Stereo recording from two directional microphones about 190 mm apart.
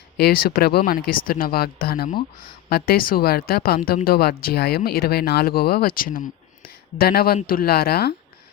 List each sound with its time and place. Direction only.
0.2 s speech: 50° left (ahead or behind)